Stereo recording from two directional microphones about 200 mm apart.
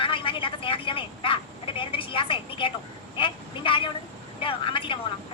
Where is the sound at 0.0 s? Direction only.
25° left (ahead or behind).